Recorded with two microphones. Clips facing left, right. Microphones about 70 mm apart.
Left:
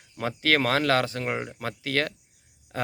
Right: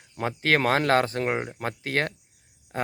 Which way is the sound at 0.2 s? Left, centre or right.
Right.